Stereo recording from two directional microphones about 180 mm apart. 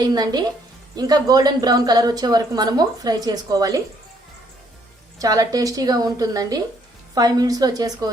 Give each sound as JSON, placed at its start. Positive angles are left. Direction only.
{"t": 0.0, "sound": "a woman's voice", "side_deg": -20}
{"t": 5.2, "sound": "a woman's voice", "side_deg": -20}